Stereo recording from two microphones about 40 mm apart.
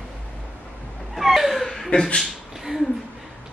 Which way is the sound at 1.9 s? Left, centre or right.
Centre.